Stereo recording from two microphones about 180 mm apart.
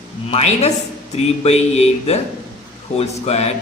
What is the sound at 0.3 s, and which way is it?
A man's voice, 35° left (ahead or behind).